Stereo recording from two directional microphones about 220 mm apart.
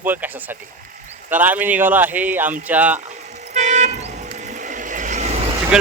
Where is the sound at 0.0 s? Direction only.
10° right (ahead or behind).